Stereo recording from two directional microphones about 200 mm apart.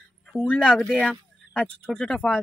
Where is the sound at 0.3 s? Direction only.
5° left (ahead or behind).